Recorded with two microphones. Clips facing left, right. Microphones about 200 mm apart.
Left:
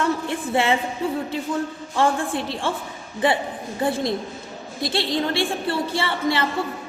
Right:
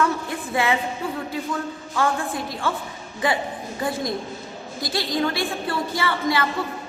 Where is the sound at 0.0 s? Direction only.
30° left (ahead or behind).